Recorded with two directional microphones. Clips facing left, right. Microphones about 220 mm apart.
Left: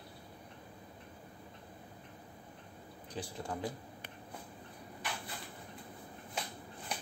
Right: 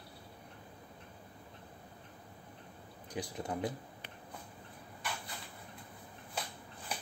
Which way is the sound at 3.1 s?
15° right (ahead or behind).